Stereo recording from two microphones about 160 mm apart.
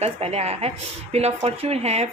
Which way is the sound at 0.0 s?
40° right (ahead or behind).